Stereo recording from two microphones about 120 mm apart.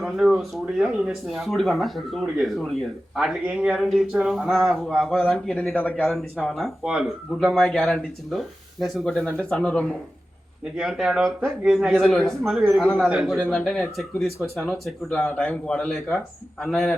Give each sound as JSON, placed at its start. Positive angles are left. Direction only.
{"t": 0.0, "sound": "a man's voice", "side_deg": -5}
{"t": 13.4, "sound": "a man's voice", "side_deg": 5}